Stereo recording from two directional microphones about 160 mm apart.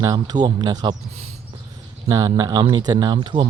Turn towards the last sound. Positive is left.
turn(degrees=-30)  # may be behind; listen again after turning